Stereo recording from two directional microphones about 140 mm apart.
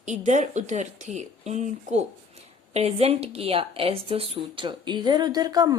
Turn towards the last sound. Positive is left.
turn(degrees=-25)  # may be behind; listen again after turning